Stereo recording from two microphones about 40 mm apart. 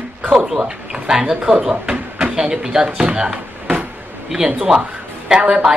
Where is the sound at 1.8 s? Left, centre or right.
Right.